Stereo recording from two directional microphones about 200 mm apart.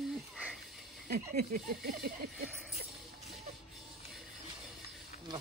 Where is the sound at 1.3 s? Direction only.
40° right (ahead or behind).